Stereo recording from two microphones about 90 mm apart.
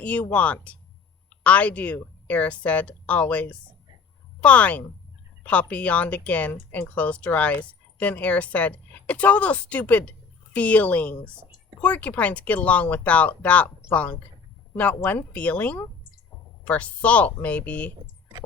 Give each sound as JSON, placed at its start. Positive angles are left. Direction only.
{"t": 0.0, "sound": "speech", "side_deg": 15}